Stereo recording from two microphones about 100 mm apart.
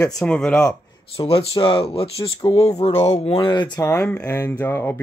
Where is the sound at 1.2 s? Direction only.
65° left (ahead or behind); by 3.4 s 90° left.